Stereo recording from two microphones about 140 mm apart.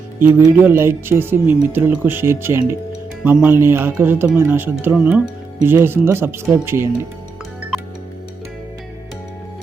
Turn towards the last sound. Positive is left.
turn(degrees=0)  # may be behind; listen again after turning